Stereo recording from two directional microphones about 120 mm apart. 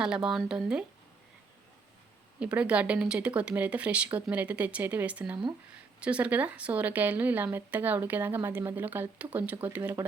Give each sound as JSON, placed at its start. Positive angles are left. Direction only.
{"t": 0.0, "sound": "speech", "side_deg": -5}
{"t": 2.4, "sound": "speech", "side_deg": -10}